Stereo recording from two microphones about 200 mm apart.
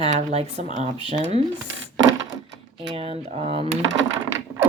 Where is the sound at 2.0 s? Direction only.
70° right (ahead or behind).